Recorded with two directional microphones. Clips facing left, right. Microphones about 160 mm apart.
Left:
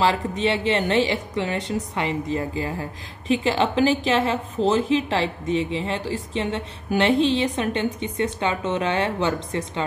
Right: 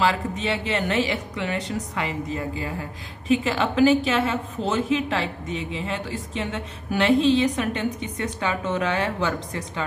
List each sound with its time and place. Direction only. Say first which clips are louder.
0.0 s a woman's voice: left 2 dB; 30° left (ahead or behind)